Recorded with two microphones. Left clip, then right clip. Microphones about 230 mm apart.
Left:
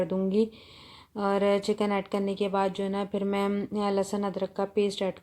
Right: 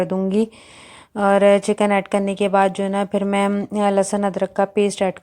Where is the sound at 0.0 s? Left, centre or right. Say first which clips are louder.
Right 6 dB; right.